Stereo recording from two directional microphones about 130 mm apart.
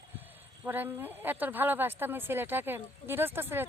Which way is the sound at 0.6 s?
15° right (ahead or behind).